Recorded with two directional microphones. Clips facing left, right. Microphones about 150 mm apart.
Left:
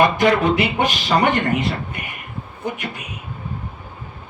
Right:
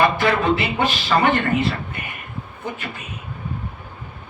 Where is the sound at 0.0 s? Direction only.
15° left (ahead or behind).